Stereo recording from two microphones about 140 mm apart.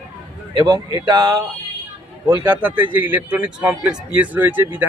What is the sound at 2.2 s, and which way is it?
A man's voice, 15° right (ahead or behind).